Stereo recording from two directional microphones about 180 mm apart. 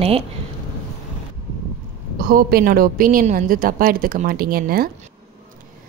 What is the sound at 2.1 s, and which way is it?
Speech, 50° right (ahead or behind).